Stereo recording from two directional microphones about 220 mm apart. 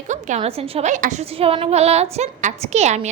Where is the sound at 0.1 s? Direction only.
30° right (ahead or behind).